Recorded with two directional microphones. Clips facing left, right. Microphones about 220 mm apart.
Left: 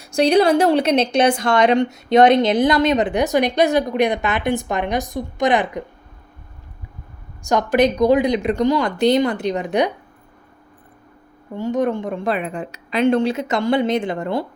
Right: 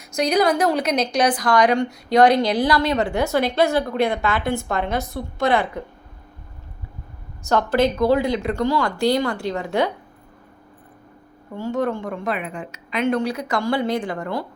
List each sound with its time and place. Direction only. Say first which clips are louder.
0.0 s a woman's voice: left 4 dB; 30° left (ahead or behind)
7.4 s a woman's voice: left 2 dB; 15° left (ahead or behind)
11.5 s a woman's voice: left 3 dB; 20° left (ahead or behind)